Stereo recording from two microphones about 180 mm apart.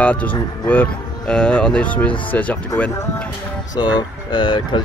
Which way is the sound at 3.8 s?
25° left (ahead or behind).